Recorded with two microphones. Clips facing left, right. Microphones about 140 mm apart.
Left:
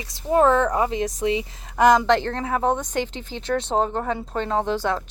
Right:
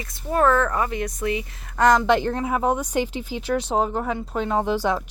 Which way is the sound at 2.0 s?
10° right (ahead or behind).